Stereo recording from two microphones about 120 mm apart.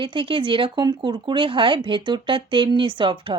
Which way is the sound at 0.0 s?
45° right (ahead or behind).